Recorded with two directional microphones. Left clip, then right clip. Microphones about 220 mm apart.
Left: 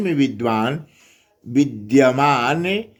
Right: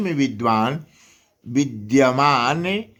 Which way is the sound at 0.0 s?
15° right (ahead or behind).